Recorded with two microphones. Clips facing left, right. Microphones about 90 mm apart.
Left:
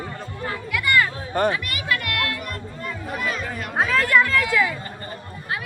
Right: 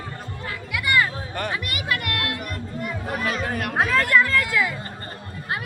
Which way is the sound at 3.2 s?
60° right (ahead or behind).